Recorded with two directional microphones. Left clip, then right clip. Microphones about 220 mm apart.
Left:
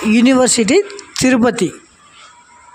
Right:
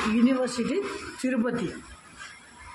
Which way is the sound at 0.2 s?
50° left (ahead or behind).